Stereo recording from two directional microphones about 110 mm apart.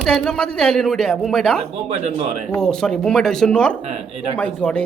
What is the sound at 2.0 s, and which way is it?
Speech, 80° right.